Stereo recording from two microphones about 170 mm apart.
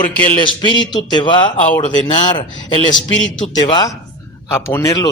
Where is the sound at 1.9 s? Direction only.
45° left (ahead or behind).